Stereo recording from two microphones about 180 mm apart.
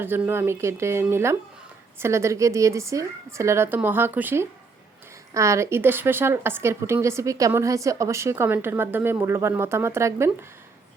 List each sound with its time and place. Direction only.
0.0 s a woman's voice: 10° right (ahead or behind)